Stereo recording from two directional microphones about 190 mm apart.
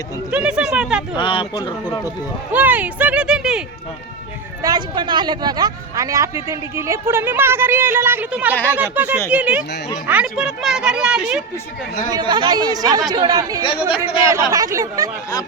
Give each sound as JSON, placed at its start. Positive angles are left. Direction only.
{"t": 0.3, "sound": "speech", "side_deg": -5}
{"t": 1.1, "sound": "speech", "side_deg": 25}
{"t": 2.5, "sound": "speech", "side_deg": -10}
{"t": 4.6, "sound": "speech", "side_deg": -20}
{"t": 12.1, "sound": "a woman's voice", "side_deg": -20}
{"t": 13.6, "sound": "speech", "side_deg": 30}
{"t": 14.3, "sound": "speech", "side_deg": -15}